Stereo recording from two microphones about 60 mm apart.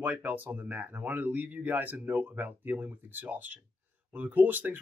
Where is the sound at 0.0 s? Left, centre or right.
Right.